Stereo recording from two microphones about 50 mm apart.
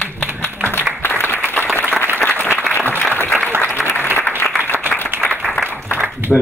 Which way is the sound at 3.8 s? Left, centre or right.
Centre.